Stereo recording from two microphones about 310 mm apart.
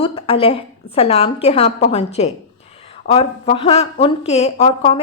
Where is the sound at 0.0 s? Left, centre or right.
Centre.